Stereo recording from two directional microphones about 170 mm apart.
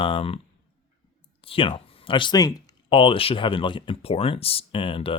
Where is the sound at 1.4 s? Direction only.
30° left (ahead or behind).